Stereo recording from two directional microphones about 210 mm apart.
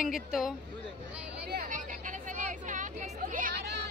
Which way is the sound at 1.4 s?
45° right (ahead or behind).